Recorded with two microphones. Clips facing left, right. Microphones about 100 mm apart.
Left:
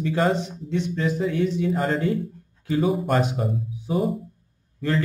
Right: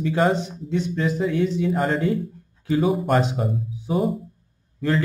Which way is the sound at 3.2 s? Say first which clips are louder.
Right 1 dB; 30° right (ahead or behind).